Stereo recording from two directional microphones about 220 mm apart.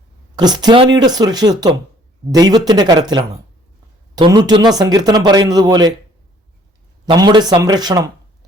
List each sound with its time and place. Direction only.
0.3 s speech: 20° right (ahead or behind)
7.0 s speech: 20° right (ahead or behind)